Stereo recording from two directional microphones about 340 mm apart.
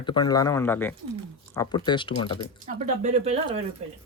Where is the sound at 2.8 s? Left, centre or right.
Centre.